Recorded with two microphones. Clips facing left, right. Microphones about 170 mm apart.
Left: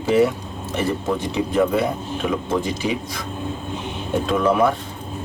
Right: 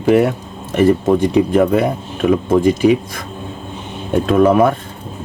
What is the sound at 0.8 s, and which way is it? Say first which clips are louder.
Speech: right 10 dB; 50° right (ahead or behind).